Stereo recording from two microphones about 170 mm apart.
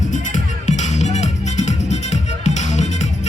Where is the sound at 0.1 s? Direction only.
45° left (ahead or behind).